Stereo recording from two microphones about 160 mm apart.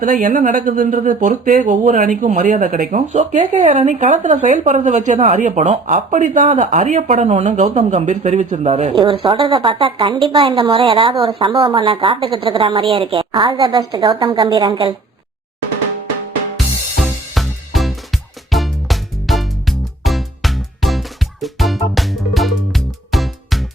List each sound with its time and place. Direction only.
0.0 s a woman's voice: 50° right (ahead or behind); by 14.9 s 25° right (ahead or behind)
17.0 s music: centre (ahead or behind)